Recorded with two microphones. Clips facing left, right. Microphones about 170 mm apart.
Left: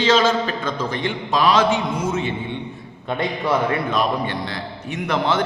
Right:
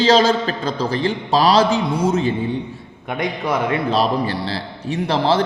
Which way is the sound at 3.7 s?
35° right (ahead or behind).